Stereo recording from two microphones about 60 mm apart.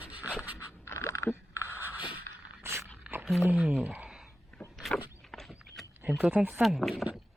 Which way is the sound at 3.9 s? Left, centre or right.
Centre.